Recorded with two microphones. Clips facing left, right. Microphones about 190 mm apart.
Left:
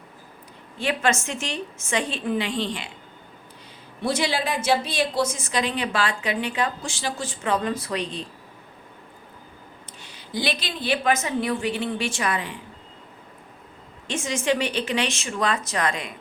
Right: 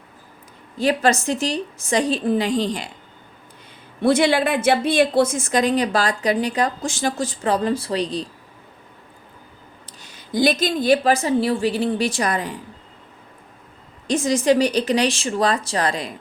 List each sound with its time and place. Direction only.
0.8 s a woman's voice: 35° right (ahead or behind)
4.0 s a woman's voice: 55° right (ahead or behind); by 8.3 s 35° right (ahead or behind)
9.8 s a woman's voice: 45° right (ahead or behind)
14.1 s a woman's voice: 35° right (ahead or behind)